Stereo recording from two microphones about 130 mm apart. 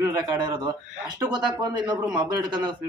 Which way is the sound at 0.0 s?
30° right (ahead or behind).